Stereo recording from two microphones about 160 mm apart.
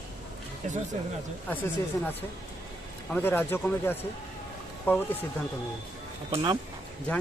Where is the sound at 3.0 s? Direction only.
10° left (ahead or behind).